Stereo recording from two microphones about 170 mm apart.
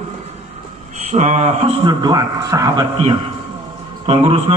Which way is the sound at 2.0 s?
25° right (ahead or behind).